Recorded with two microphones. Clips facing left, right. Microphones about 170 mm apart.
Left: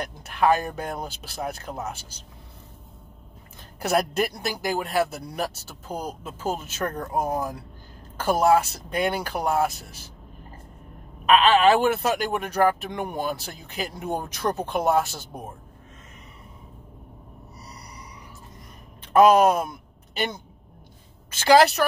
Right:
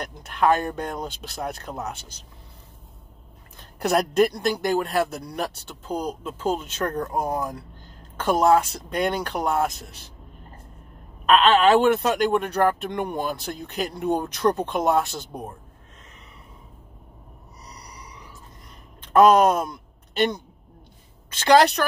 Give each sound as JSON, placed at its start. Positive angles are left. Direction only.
{"t": 0.0, "sound": "speech", "side_deg": 5}
{"t": 3.8, "sound": "speech", "side_deg": 5}
{"t": 11.2, "sound": "speech", "side_deg": 5}
{"t": 19.1, "sound": "speech", "side_deg": 5}
{"t": 21.5, "sound": "speech", "side_deg": 5}